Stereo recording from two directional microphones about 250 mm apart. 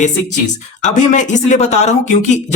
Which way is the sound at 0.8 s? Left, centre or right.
Left.